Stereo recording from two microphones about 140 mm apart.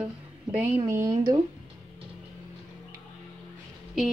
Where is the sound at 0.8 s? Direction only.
25° right (ahead or behind).